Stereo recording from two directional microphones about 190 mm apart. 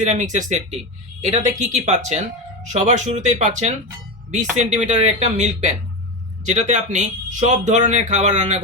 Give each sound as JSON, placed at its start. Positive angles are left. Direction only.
{"t": 0.0, "sound": "speech", "side_deg": -40}